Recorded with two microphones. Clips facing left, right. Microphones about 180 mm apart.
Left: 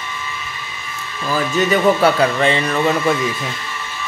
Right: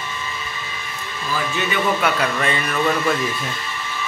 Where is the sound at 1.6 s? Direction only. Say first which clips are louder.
Left 8 dB; 35° left (ahead or behind).